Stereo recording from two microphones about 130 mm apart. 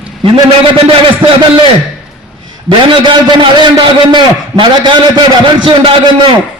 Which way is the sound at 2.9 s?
40° right (ahead or behind).